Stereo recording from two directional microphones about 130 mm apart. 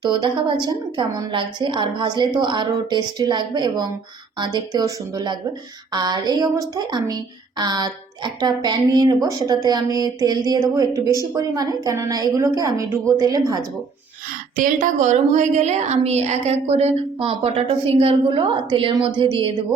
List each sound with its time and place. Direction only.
0.1 s a woman's voice: 40° right (ahead or behind)
14.5 s a woman's voice: 90° right; by 19.5 s 40° right (ahead or behind)